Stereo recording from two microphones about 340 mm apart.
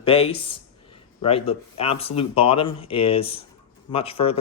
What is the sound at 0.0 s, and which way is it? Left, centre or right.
Speech, centre.